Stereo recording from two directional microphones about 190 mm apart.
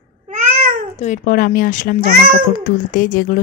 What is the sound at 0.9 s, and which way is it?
Speech, 40° left (ahead or behind).